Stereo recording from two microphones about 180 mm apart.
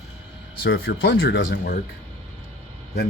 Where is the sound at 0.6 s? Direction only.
90° left; by 1.8 s 65° left (ahead or behind).